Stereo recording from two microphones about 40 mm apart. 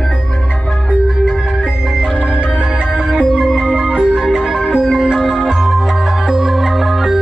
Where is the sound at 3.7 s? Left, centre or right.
Centre.